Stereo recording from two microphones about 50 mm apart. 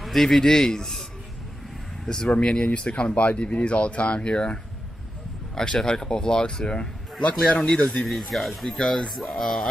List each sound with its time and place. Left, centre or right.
0.0 s speech: centre
2.0 s speech: centre